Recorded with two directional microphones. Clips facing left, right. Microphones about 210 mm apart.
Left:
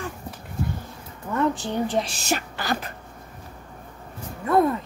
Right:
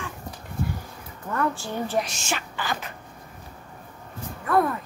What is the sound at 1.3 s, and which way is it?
Speech, 20° left (ahead or behind).